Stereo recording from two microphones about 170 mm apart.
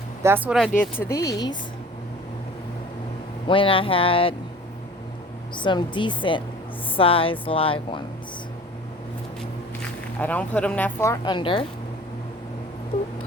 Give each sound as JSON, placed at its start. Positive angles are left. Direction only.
{"t": 0.2, "sound": "speech", "side_deg": -10}
{"t": 0.8, "sound": "speech", "side_deg": 15}
{"t": 3.4, "sound": "speech", "side_deg": 30}
{"t": 5.5, "sound": "speech", "side_deg": 25}
{"t": 10.2, "sound": "speech", "side_deg": 10}